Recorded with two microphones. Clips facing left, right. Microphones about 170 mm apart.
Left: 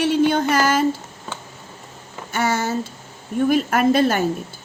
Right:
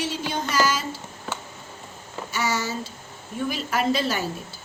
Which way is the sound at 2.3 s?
55° left (ahead or behind).